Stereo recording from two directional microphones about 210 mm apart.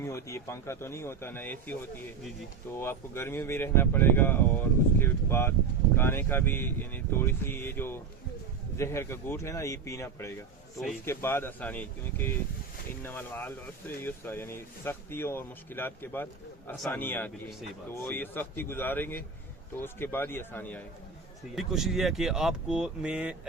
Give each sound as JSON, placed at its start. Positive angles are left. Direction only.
{"t": 0.0, "sound": "speech", "side_deg": 15}
{"t": 2.7, "sound": "speech", "side_deg": 10}
{"t": 21.5, "sound": "speech", "side_deg": 0}